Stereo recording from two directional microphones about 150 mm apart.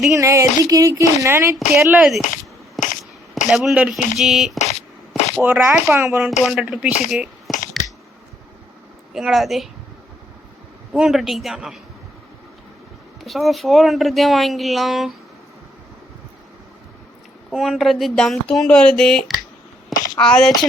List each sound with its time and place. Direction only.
0.1 s speech: 20° right (ahead or behind)
1.5 s speech: centre (ahead or behind)
2.8 s a sound: 55° left (ahead or behind)
3.5 s speech: centre (ahead or behind)
4.5 s a sound: 50° left (ahead or behind)
5.3 s speech: 10° right (ahead or behind)
9.1 s speech: centre (ahead or behind)
10.9 s speech: centre (ahead or behind)
13.2 s speech: centre (ahead or behind)
17.5 s speech: centre (ahead or behind)